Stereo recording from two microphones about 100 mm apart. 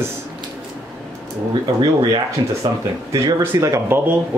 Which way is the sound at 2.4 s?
50° right (ahead or behind).